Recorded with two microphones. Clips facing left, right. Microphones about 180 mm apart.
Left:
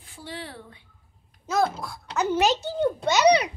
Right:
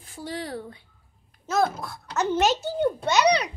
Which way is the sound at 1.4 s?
Centre (ahead or behind).